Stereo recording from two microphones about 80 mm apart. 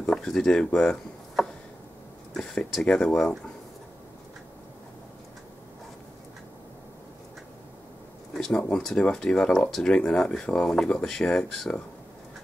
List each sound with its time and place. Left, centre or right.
0.0 s speech: centre
1.4 s a sound: centre
2.3 s speech: centre
8.4 s speech: centre